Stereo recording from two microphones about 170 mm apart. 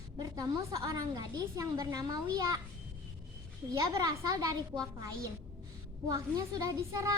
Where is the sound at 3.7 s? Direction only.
20° right (ahead or behind).